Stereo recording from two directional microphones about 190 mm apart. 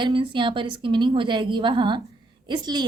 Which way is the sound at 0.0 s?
25° right (ahead or behind).